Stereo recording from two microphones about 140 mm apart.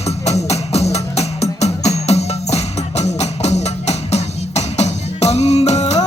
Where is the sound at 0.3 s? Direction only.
50° left (ahead or behind).